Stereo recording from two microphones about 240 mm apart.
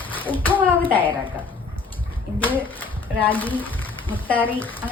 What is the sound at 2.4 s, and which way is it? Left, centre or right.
Speech, centre.